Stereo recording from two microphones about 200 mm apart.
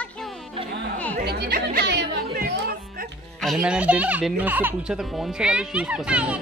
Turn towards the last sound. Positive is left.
turn(degrees=-5)  # may be behind; listen again after turning